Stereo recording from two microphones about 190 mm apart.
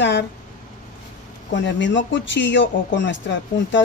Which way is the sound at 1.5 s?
70° left (ahead or behind).